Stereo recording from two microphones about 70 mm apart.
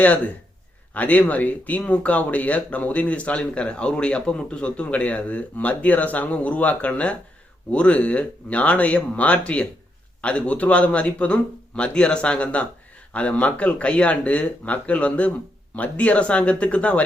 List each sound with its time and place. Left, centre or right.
0.9 s speech: left